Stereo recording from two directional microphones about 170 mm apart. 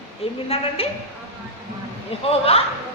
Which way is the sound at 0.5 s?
35° left (ahead or behind).